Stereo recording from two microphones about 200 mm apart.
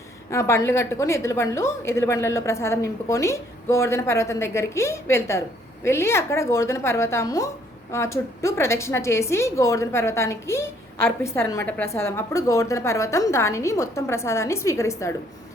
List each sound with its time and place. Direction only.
0.3 s a woman's voice: 15° left (ahead or behind)